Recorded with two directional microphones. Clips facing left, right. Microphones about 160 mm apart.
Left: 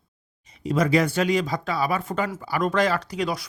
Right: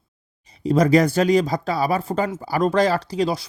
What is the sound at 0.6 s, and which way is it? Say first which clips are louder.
Speech: right 5 dB; 35° right (ahead or behind).